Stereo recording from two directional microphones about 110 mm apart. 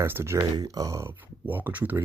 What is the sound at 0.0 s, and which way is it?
Speech, 25° right (ahead or behind).